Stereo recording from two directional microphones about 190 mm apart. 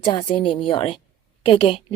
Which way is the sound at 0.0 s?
30° left (ahead or behind).